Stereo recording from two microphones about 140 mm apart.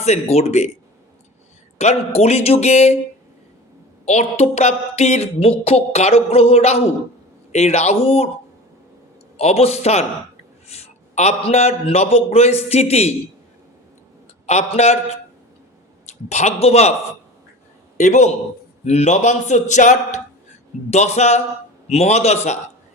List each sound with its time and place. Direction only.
0.0 s speech: 50° left (ahead or behind)
1.8 s speech: 50° left (ahead or behind)
4.0 s speech: 55° left (ahead or behind)
9.4 s speech: 50° left (ahead or behind)
14.4 s speech: 50° left (ahead or behind)
17.9 s a man's voice: 60° left (ahead or behind)